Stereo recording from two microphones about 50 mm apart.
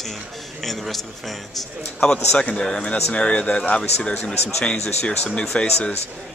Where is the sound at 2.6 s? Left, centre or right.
Centre.